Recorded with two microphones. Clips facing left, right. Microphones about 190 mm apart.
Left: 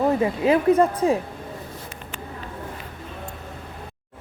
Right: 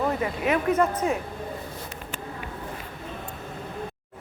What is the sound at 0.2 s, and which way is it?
A woman's voice, 30° left (ahead or behind).